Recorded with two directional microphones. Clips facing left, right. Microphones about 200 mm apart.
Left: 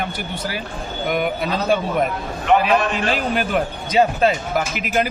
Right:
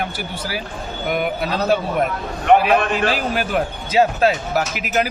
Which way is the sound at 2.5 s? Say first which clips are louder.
Right 3 dB; 55° right (ahead or behind).